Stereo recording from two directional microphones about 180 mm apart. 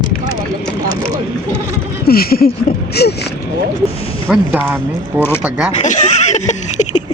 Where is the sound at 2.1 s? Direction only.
55° left (ahead or behind).